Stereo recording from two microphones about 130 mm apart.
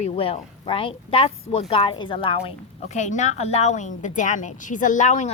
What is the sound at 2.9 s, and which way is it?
A woman's voice, 70° left (ahead or behind).